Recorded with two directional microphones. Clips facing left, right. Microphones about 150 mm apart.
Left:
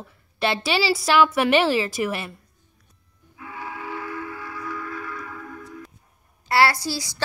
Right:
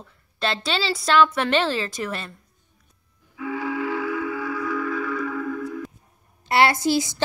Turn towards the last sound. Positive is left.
turn(degrees=-20)  # may be behind; listen again after turning